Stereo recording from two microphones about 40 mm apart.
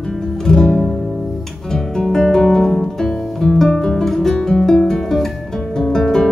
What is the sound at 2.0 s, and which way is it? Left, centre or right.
Music, centre.